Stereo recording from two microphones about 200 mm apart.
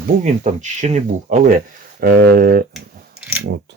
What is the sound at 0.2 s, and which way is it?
Speech, 35° right (ahead or behind).